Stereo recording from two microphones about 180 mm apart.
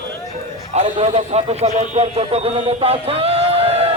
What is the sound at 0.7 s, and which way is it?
Speech, 35° right (ahead or behind).